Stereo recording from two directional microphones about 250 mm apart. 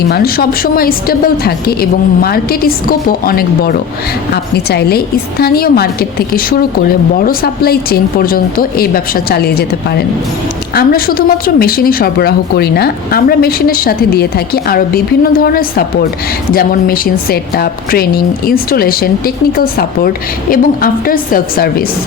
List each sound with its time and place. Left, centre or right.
0.1 s a woman's voice: left